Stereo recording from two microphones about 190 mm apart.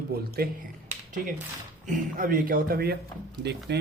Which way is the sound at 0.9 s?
40° right (ahead or behind).